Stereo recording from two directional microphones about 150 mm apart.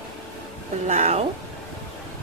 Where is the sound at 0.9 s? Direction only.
50° right (ahead or behind).